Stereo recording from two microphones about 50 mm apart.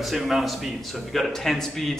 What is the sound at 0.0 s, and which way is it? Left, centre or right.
A man's voice, centre.